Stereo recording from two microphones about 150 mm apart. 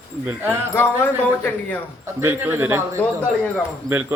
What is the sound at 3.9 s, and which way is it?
Speech, 15° right (ahead or behind).